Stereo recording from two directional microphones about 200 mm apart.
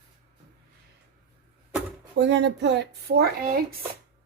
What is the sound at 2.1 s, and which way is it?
Speech, 60° right (ahead or behind).